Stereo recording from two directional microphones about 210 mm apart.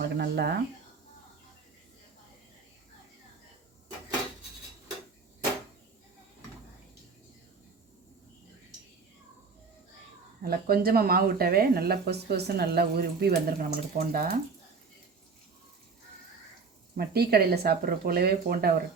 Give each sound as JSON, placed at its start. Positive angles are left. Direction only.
{"t": 0.0, "sound": "speech", "side_deg": -50}
{"t": 10.4, "sound": "speech", "side_deg": -45}
{"t": 17.0, "sound": "speech", "side_deg": -45}